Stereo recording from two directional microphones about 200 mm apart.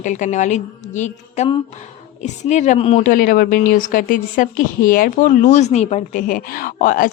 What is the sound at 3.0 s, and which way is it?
Speech, 45° left (ahead or behind).